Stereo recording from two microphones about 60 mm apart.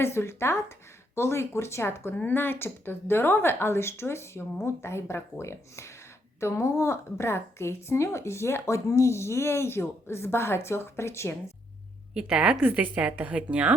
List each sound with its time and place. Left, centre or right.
0.0 s a woman's voice: left
12.1 s a woman's voice: centre